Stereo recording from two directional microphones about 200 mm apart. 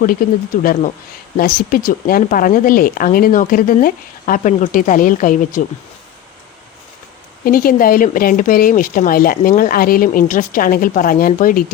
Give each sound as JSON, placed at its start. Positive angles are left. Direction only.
{"t": 0.6, "sound": "speech", "side_deg": 45}
{"t": 7.4, "sound": "speech", "side_deg": 45}